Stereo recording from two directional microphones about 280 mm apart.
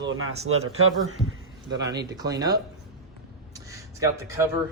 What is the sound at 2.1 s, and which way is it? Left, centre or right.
Speech, centre.